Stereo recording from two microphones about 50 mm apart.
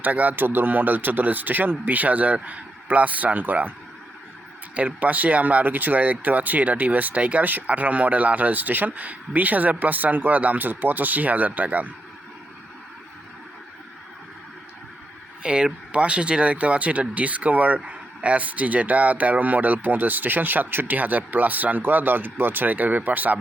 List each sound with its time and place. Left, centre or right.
0.0 s speech: right
15.4 s speech: right